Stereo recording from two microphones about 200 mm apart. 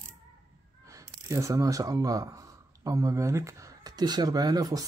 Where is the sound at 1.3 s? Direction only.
15° right (ahead or behind).